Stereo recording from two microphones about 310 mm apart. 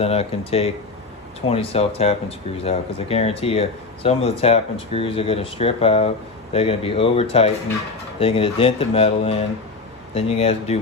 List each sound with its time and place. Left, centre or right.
0.0 s speech: centre